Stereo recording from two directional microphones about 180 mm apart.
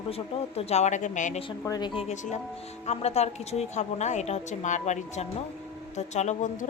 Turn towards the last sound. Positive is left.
turn(degrees=40)  # may be behind; listen again after turning